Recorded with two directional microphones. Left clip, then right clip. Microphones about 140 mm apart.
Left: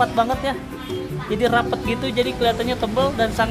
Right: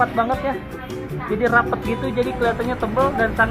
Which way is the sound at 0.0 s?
20° left (ahead or behind).